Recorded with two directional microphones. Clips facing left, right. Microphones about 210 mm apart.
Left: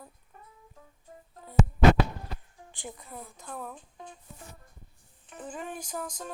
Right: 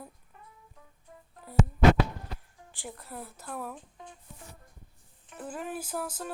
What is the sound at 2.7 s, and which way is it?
A woman's voice, centre (ahead or behind).